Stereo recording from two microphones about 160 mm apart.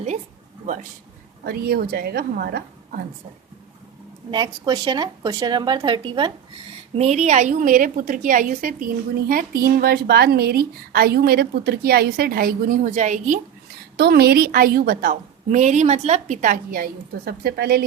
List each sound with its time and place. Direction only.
0.6 s a man's voice: 50° right (ahead or behind)
1.5 s a woman's voice: 75° right (ahead or behind)
4.3 s speech: 25° right (ahead or behind)
6.9 s a woman's voice: 45° right (ahead or behind)
13.9 s a woman's voice: 85° right